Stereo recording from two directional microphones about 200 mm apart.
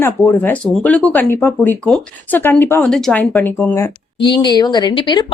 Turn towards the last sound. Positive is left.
turn(degrees=20)  # may be behind; listen again after turning